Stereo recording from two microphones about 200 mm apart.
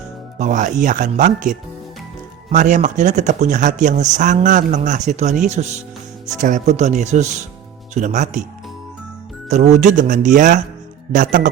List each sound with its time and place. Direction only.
0.3 s speech: 40° right (ahead or behind)
9.5 s speech: 35° right (ahead or behind)